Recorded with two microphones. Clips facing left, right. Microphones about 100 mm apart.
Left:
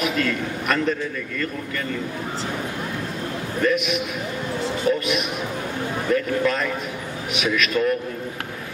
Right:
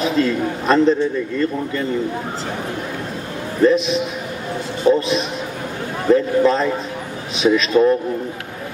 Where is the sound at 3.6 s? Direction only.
30° right (ahead or behind).